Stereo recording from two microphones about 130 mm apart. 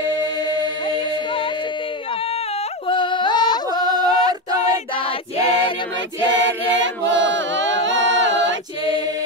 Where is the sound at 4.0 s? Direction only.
65° left (ahead or behind).